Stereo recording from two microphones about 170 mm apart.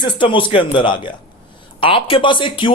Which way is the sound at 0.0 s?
30° left (ahead or behind).